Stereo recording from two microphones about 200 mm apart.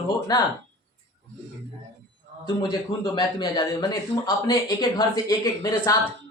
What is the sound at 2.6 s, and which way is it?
A man's voice, 20° left (ahead or behind).